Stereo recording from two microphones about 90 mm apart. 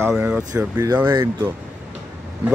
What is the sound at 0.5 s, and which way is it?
Speech, 45° right (ahead or behind).